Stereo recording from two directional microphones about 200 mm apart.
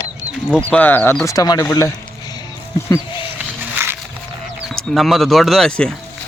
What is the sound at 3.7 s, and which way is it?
Wild animals, 10° right (ahead or behind).